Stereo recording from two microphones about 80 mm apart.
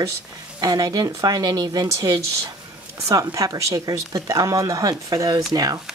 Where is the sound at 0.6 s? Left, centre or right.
Right.